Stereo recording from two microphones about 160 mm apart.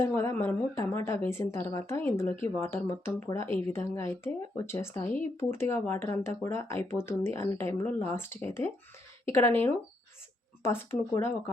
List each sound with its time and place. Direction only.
0.0 s speech: 15° left (ahead or behind)
10.6 s speech: 15° left (ahead or behind)